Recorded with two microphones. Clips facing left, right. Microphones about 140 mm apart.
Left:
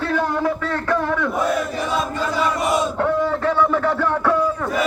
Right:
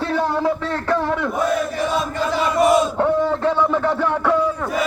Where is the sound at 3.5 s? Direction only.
20° right (ahead or behind).